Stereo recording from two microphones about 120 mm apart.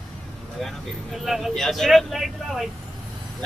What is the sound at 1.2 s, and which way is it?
A man's voice, centre (ahead or behind).